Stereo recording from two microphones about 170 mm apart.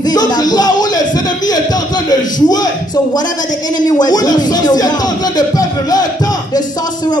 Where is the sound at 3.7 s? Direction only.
25° left (ahead or behind).